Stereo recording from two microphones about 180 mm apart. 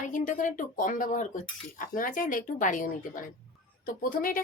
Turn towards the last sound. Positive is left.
turn(degrees=50)  # may be behind; listen again after turning